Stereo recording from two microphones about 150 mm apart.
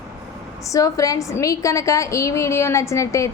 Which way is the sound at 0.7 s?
20° left (ahead or behind).